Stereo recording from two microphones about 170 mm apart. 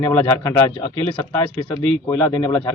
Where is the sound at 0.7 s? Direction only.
30° left (ahead or behind).